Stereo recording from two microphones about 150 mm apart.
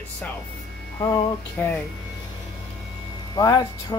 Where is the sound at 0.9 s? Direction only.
30° left (ahead or behind).